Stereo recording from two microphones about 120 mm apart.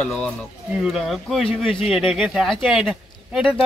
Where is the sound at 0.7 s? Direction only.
5° right (ahead or behind).